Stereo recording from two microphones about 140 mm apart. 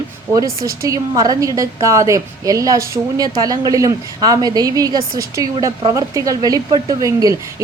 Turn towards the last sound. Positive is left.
turn(degrees=-25)  # may be behind; listen again after turning